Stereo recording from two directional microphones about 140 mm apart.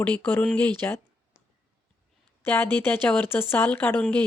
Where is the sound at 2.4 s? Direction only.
15° left (ahead or behind).